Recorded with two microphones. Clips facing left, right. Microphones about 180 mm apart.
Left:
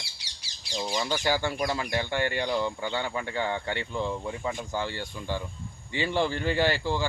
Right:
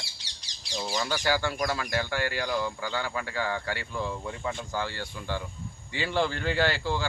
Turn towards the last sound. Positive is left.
turn(degrees=15)  # may be behind; listen again after turning